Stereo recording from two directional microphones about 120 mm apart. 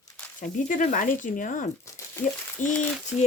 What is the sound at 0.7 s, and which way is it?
Speech, 90° left.